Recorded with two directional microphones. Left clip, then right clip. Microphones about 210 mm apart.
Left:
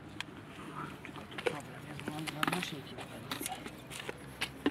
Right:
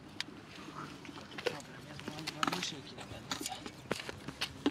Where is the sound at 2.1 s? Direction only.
20° left (ahead or behind).